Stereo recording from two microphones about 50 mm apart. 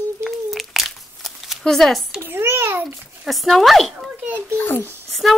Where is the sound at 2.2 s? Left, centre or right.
Right.